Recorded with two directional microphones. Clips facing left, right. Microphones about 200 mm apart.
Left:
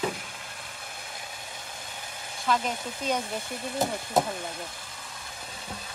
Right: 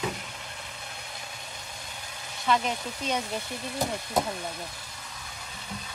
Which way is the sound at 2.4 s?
Centre (ahead or behind).